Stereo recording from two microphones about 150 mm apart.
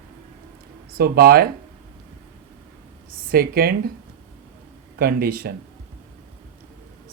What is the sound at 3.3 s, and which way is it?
Speech, 80° right.